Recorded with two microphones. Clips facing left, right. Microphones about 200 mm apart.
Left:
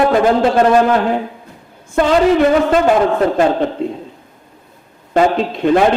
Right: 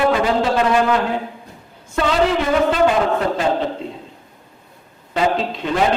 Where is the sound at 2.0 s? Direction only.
50° left (ahead or behind).